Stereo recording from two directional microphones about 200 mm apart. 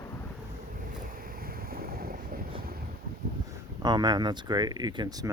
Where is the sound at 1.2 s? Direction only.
45° right (ahead or behind).